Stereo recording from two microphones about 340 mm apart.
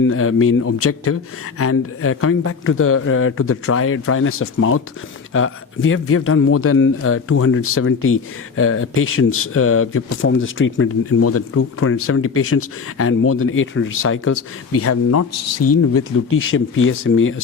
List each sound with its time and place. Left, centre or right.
0.0 s a man's voice: left